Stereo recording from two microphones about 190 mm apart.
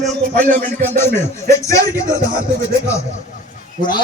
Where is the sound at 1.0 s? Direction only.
10° left (ahead or behind).